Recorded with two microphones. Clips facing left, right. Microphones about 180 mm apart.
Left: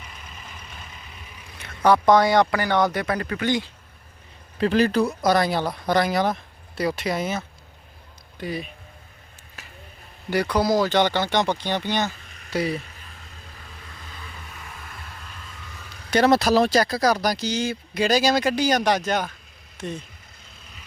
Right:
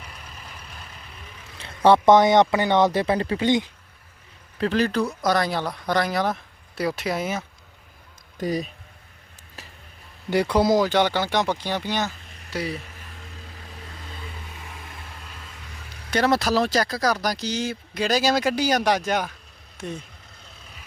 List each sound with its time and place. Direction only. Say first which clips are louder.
0.3 s vehicle: even; centre (ahead or behind)
1.5 s speech: right 2 dB; 25° right (ahead or behind)
4.6 s speech: left 3 dB; 5° left (ahead or behind); by 7.4 s 10° right (ahead or behind)
8.4 s speech: right 4 dB; 40° right (ahead or behind)
10.2 s speech: right 2 dB; 25° right (ahead or behind)
10.8 s speech: even; 10° right (ahead or behind)
16.1 s speech: left 3 dB; 20° left (ahead or behind)
17.2 s speech: left 2 dB; centre (ahead or behind)